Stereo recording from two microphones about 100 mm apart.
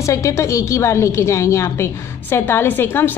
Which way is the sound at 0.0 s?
30° left (ahead or behind).